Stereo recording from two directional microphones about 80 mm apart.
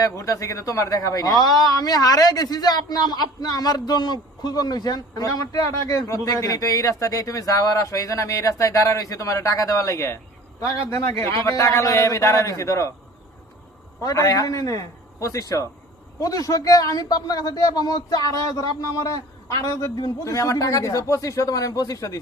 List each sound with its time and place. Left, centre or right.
0.0 s a man's voice: left
14.0 s a man's voice: left